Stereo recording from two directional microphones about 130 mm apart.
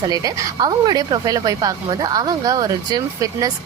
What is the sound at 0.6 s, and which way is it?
A woman's voice, 30° right (ahead or behind).